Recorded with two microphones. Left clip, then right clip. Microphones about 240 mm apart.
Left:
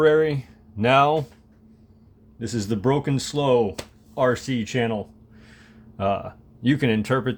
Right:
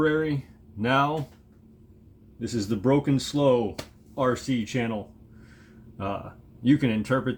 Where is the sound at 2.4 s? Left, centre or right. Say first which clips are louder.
Left 2 dB; left.